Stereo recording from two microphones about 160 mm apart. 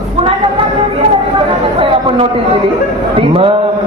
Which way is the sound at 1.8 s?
35° right (ahead or behind).